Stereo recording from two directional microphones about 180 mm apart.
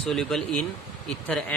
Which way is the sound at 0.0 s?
Centre (ahead or behind).